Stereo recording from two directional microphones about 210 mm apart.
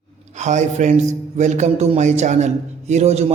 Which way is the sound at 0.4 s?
35° right (ahead or behind).